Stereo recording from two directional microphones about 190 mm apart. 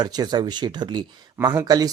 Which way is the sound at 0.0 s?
20° right (ahead or behind).